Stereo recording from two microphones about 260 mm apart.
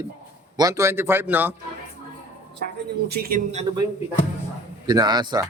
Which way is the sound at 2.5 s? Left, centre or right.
Right.